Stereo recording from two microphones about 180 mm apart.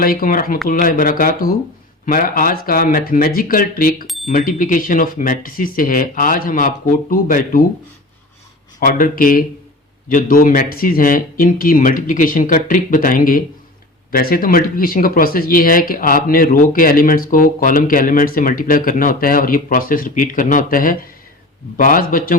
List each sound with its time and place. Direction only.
0.0 s speech: 50° left (ahead or behind)
8.8 s speech: 50° left (ahead or behind)